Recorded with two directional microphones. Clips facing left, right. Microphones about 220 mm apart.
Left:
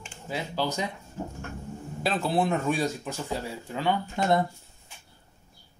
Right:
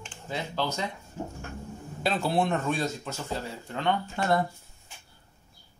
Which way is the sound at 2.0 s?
Centre (ahead or behind).